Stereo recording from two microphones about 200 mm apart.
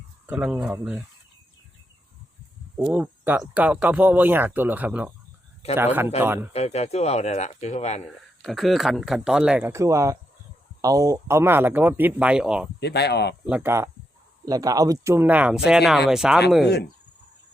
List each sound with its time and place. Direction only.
0.3 s speech: 5° right (ahead or behind)
2.7 s speech: 5° right (ahead or behind)
6.5 s speech: 35° left (ahead or behind)
8.4 s speech: centre (ahead or behind)
12.8 s speech: 55° left (ahead or behind)
13.4 s speech: 10° right (ahead or behind)